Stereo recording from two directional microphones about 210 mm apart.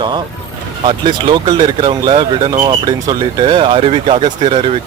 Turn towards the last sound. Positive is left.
turn(degrees=-20)  # may be behind; listen again after turning